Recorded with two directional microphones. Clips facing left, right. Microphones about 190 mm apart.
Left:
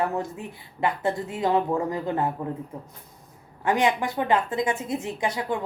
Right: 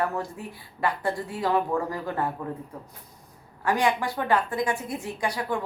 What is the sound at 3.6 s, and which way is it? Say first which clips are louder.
A woman's voice: left 2 dB; 20° left (ahead or behind).